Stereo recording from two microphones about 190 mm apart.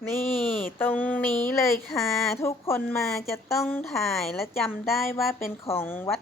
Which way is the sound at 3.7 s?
5° left (ahead or behind).